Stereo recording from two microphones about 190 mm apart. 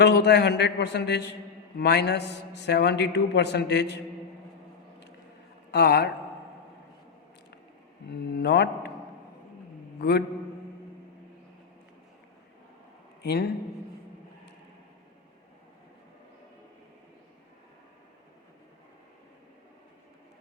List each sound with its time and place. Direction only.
0.0 s a man's voice: 65° left (ahead or behind)
5.7 s a man's voice: 60° left (ahead or behind)
8.1 s a man's voice: 60° left (ahead or behind)
10.0 s a man's voice: 60° left (ahead or behind)
13.2 s a man's voice: 60° left (ahead or behind)